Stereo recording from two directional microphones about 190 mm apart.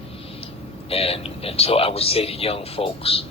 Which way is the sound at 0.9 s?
30° left (ahead or behind).